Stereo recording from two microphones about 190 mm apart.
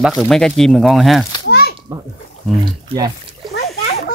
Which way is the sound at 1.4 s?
55° left (ahead or behind).